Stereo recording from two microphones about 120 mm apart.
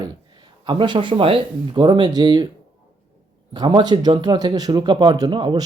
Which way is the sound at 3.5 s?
35° right (ahead or behind).